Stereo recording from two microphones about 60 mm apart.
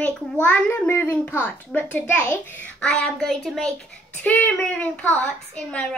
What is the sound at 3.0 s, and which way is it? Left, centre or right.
Speech, centre.